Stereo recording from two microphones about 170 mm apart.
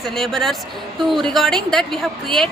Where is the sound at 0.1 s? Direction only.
Centre (ahead or behind).